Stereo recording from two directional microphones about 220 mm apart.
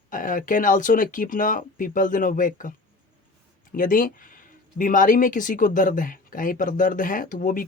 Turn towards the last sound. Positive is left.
turn(degrees=40)  # may be behind; listen again after turning